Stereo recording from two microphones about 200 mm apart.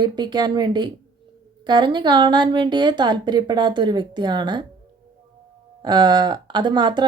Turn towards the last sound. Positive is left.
turn(degrees=-20)  # may be behind; listen again after turning